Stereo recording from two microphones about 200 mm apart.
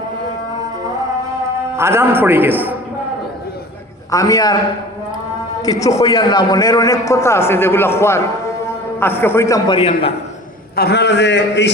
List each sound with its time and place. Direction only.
1.7 s a man's voice: 15° right (ahead or behind)
4.1 s a man's voice: 20° left (ahead or behind)
5.6 s a man's voice: 15° left (ahead or behind)
9.7 s a man's voice: 30° left (ahead or behind)
10.8 s a man's voice: 55° left (ahead or behind)